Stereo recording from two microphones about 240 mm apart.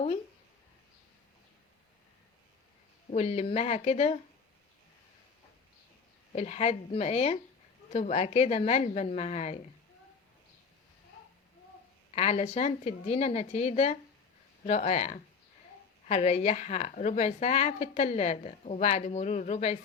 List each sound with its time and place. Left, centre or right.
3.1 s a woman's voice: left
6.3 s a woman's voice: left
12.1 s a woman's voice: left